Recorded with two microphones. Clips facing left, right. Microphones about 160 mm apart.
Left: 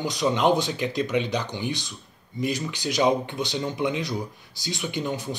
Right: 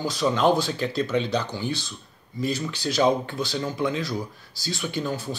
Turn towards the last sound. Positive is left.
turn(degrees=20)  # may be behind; listen again after turning